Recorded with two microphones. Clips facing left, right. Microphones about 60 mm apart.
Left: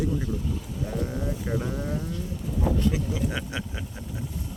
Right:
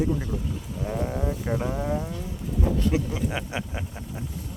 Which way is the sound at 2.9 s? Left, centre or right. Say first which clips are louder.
Right 2 dB; right.